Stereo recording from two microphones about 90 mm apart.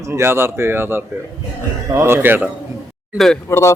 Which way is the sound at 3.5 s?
30° left (ahead or behind).